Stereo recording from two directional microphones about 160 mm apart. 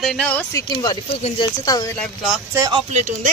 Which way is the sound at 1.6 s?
25° left (ahead or behind).